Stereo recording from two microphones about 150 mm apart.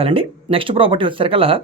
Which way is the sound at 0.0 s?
40° right (ahead or behind).